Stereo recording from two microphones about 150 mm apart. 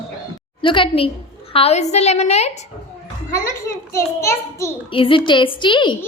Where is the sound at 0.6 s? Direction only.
35° left (ahead or behind).